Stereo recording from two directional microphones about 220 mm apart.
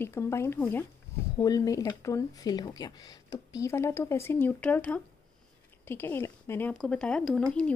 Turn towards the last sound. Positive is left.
turn(degrees=5)  # may be behind; listen again after turning